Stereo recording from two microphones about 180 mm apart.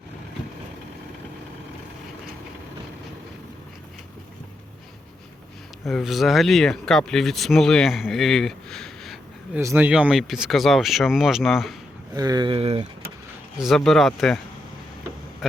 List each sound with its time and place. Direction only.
5.8 s speech: centre (ahead or behind)
9.6 s speech: 10° right (ahead or behind)
12.1 s speech: 20° right (ahead or behind)
13.6 s speech: centre (ahead or behind)